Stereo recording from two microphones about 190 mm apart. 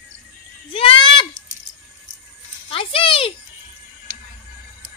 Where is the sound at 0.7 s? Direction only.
25° left (ahead or behind).